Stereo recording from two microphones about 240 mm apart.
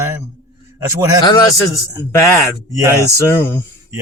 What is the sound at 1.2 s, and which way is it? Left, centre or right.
Speech, centre.